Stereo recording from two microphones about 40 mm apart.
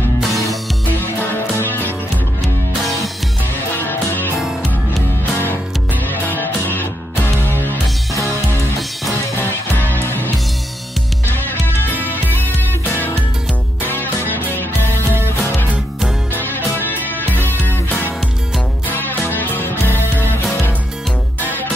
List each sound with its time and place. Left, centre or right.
0.2 s music: centre
1.0 s music: left
3.7 s music: left
6.0 s music: left
9.4 s music: left
14.3 s music: left
16.3 s music: left
21.4 s music: left